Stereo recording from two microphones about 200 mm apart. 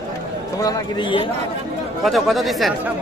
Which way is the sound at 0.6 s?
20° left (ahead or behind).